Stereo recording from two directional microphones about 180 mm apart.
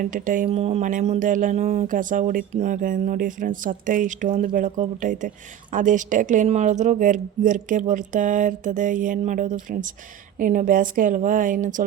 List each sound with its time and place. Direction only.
0.0 s speech: 50° right (ahead or behind)